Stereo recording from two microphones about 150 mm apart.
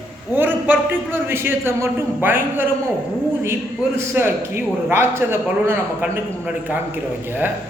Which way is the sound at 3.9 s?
15° right (ahead or behind).